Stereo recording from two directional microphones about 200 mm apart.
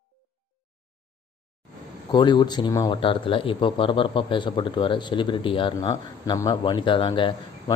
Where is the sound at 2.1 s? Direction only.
20° left (ahead or behind).